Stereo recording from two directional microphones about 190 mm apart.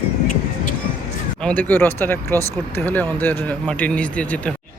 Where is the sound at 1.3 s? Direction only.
5° left (ahead or behind).